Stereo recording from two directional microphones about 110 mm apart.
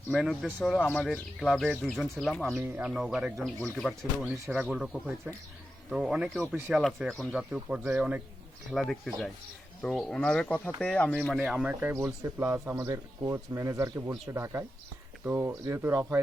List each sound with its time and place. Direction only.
0.1 s speech: centre (ahead or behind)
2.6 s speech: 20° right (ahead or behind)
2.8 s speech: 5° right (ahead or behind)
4.7 s speech: 10° right (ahead or behind)
7.3 s speech: 10° right (ahead or behind)
8.7 s speech: centre (ahead or behind)
11.6 s speech: 15° right (ahead or behind); by 16.2 s 30° right (ahead or behind)